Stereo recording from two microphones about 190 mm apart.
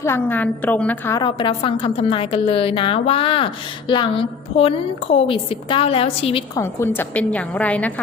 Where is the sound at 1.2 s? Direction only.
25° left (ahead or behind).